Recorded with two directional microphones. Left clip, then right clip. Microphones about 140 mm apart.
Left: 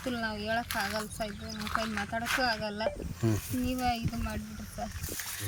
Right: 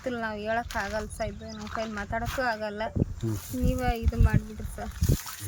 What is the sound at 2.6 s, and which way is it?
Speech, 20° right (ahead or behind).